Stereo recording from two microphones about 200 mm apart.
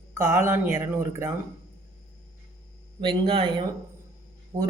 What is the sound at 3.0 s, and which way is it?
Speech, 25° right (ahead or behind).